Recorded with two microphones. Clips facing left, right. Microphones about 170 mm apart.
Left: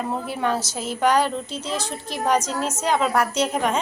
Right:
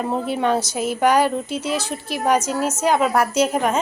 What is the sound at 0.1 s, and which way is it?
A woman's voice, 20° right (ahead or behind).